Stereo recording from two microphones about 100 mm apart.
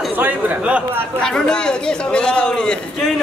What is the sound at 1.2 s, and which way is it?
Speech, 5° left (ahead or behind).